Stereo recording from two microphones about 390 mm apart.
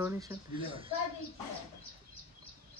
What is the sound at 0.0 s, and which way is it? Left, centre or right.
Speech, centre.